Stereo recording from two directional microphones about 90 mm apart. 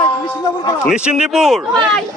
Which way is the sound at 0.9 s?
10° right (ahead or behind).